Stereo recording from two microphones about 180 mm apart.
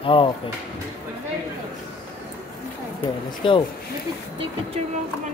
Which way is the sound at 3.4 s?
30° left (ahead or behind).